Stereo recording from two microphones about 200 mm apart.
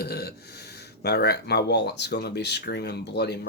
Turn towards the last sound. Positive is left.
turn(degrees=55)  # may be behind; listen again after turning